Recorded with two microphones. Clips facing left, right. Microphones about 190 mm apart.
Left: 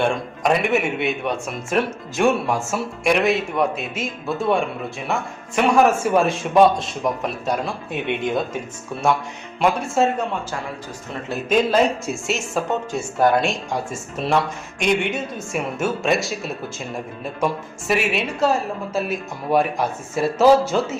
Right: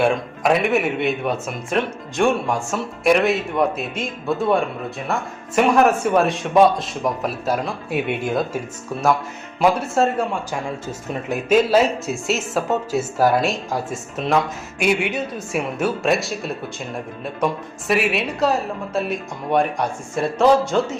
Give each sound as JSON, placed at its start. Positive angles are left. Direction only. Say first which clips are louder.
{"t": 0.0, "sound": "speech", "louder": "right 2 dB", "side_deg": 0}
{"t": 9.6, "sound": "speech", "louder": "right 1 dB", "side_deg": 0}
{"t": 11.1, "sound": "speech", "louder": "right 3 dB", "side_deg": -15}
{"t": 11.5, "sound": "speech", "louder": "right 2 dB", "side_deg": -5}